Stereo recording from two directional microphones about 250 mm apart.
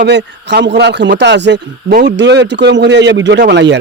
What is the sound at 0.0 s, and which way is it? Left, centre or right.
A man's voice, right.